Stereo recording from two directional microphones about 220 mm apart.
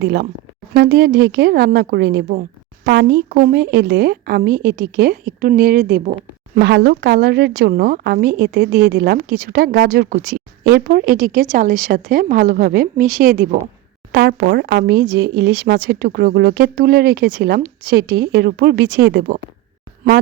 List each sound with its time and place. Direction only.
0.0 s a woman's voice: 45° right (ahead or behind)